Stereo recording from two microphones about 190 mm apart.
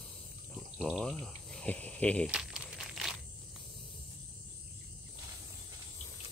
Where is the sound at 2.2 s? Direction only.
5° right (ahead or behind).